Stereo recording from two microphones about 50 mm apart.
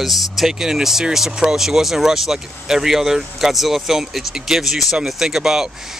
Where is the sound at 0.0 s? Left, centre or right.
Centre.